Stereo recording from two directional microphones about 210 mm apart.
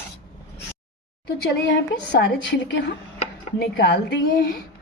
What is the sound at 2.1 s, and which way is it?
A woman's voice, 55° left (ahead or behind).